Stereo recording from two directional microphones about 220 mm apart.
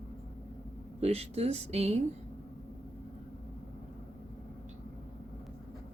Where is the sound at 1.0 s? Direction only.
30° right (ahead or behind).